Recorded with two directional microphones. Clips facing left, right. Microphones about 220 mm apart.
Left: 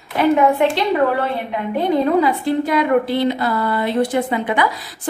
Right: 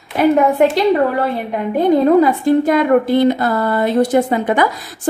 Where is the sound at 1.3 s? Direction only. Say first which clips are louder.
Right 3 dB; 45° right (ahead or behind).